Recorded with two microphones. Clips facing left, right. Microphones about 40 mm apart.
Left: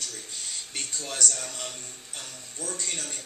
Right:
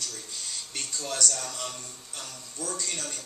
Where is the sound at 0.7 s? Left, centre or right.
Left.